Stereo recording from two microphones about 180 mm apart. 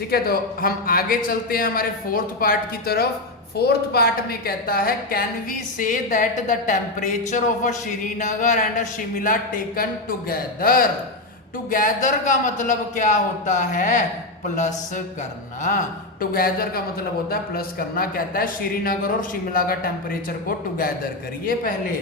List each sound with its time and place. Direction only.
0.1 s a man's voice: 55° left (ahead or behind)
12.0 s a woman's voice: 45° left (ahead or behind)
16.3 s a man's voice: 55° left (ahead or behind)